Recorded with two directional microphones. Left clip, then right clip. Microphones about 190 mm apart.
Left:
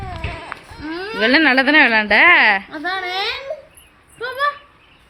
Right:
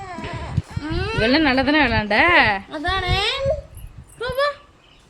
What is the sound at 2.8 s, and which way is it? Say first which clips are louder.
Speech: even; 45° right (ahead or behind).